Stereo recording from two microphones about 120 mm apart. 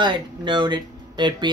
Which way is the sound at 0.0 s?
40° right (ahead or behind).